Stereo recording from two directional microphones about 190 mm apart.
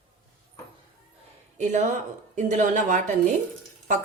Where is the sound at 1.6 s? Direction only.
40° right (ahead or behind).